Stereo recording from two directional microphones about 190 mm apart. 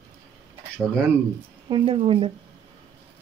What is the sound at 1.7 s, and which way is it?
Speech, 30° right (ahead or behind).